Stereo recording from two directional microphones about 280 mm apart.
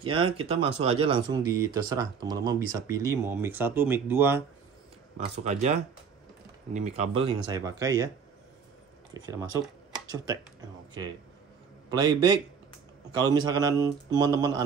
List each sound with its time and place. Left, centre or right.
0.1 s speech: centre
5.4 s speech: right
9.1 s speech: centre